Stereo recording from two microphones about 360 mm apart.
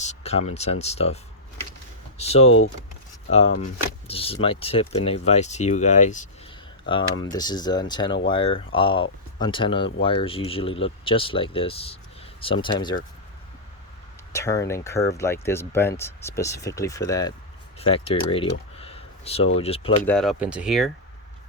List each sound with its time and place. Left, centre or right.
0.0 s speech: centre
2.1 s a sound: centre
2.4 s speech: left
3.2 s speech: centre
7.3 s speech: centre
14.3 s speech: centre
18.8 s a sound: centre
19.5 s speech: centre
20.1 s speech: centre